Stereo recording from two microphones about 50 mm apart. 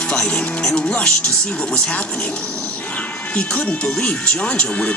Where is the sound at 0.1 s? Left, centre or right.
Centre.